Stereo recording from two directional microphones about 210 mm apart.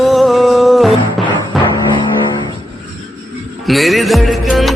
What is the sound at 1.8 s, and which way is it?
Music, 20° left (ahead or behind).